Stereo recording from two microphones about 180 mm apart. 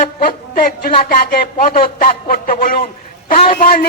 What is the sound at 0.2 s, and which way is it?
A man's voice, 50° left (ahead or behind).